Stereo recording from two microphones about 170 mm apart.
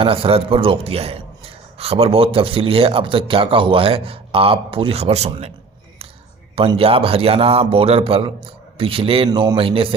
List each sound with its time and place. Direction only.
0.0 s a man's voice: 35° right (ahead or behind)
6.6 s a man's voice: 35° right (ahead or behind)